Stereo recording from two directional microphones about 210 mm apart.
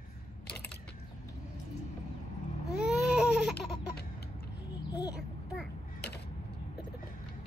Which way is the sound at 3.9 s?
50° left (ahead or behind).